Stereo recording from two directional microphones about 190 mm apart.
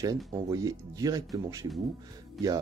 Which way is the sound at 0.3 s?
20° right (ahead or behind).